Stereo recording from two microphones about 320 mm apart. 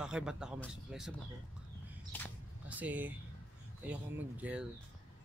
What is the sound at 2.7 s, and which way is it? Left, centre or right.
Speech, centre.